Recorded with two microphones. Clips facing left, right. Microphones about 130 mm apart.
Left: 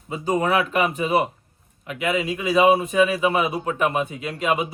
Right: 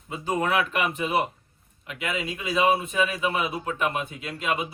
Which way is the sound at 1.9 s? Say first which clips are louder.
Left 7 dB; 45° left (ahead or behind).